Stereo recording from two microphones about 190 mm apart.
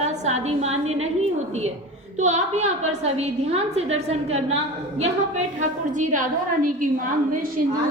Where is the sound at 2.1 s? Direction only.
35° right (ahead or behind).